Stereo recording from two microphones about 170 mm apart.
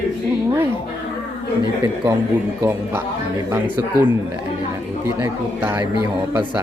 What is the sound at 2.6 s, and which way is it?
A man's voice, 15° right (ahead or behind).